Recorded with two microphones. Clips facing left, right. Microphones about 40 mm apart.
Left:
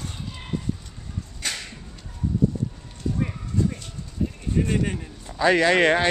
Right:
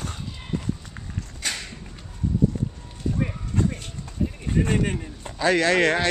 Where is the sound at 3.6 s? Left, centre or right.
Right.